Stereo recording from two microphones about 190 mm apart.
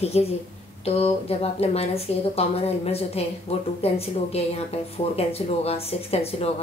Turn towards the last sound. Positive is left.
turn(degrees=30)  # may be behind; listen again after turning